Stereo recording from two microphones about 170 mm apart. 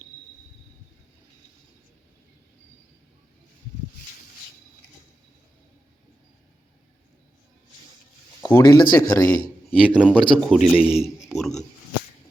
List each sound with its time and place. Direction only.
8.4 s speech: 15° left (ahead or behind)
9.8 s speech: 5° right (ahead or behind)